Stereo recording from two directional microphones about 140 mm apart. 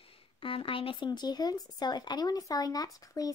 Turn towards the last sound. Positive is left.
turn(degrees=25)  # may be behind; listen again after turning